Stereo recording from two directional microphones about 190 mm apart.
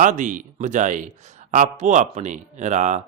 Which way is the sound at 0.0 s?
40° right (ahead or behind).